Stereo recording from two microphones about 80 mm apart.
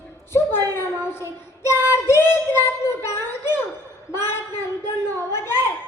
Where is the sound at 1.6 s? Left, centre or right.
Left.